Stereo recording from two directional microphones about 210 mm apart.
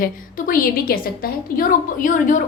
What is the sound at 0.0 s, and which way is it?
A woman's voice, 40° left (ahead or behind).